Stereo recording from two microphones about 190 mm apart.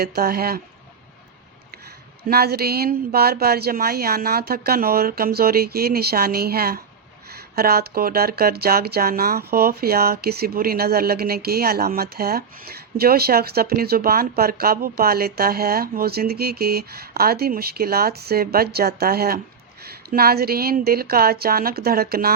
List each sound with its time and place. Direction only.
0.0 s speech: 55° right (ahead or behind)
2.2 s speech: 55° right (ahead or behind)